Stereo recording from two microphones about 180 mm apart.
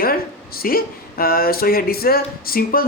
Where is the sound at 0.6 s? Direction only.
55° left (ahead or behind).